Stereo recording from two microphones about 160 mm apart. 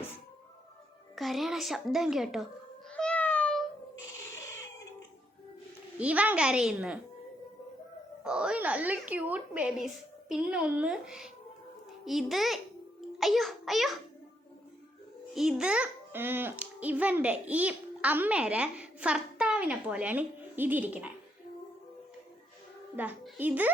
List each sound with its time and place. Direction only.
1.1 s a woman's voice: centre (ahead or behind)
2.9 s meow: 10° left (ahead or behind)
6.0 s a child's voice: 10° right (ahead or behind)
8.2 s a child's voice: 5° right (ahead or behind)
15.4 s a child's voice: 5° right (ahead or behind)
23.0 s a child's voice: 10° right (ahead or behind)